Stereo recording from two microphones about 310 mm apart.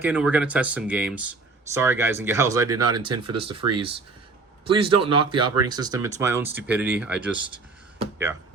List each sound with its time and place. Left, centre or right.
0.0 s speech: centre
7.4 s speech: centre